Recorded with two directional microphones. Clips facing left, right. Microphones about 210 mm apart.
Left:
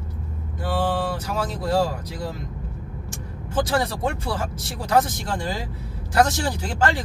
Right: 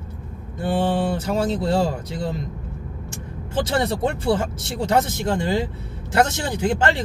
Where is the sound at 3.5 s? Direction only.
25° right (ahead or behind).